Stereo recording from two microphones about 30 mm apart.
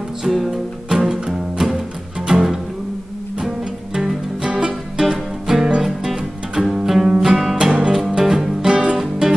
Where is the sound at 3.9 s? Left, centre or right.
Centre.